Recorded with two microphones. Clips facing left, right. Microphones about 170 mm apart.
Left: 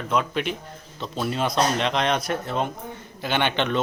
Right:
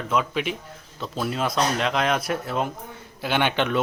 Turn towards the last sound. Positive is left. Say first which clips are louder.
# right 1 dB
turn(degrees=-5)  # may be behind; listen again after turning